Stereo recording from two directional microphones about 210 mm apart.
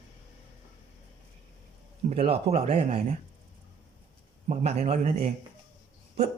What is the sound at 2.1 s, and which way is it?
Speech, 30° right (ahead or behind).